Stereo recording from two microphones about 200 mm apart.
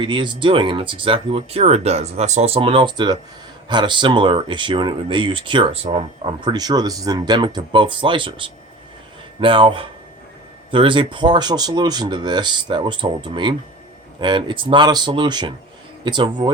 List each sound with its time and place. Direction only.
0.0 s speech: 25° right (ahead or behind)